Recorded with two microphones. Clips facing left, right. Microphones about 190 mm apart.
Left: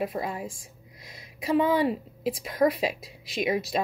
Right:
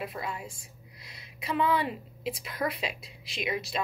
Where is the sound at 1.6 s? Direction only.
45° left (ahead or behind).